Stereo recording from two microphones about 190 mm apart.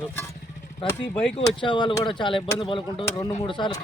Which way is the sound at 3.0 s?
15° left (ahead or behind).